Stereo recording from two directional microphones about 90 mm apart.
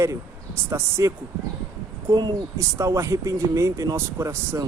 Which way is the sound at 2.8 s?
35° right (ahead or behind).